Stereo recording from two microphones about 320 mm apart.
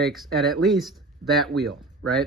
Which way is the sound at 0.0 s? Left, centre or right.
Centre.